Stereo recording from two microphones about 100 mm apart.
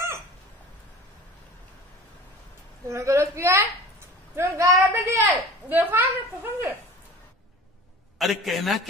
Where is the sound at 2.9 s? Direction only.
30° right (ahead or behind).